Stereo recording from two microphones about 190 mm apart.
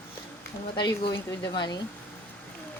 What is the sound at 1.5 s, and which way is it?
Speech, 25° left (ahead or behind).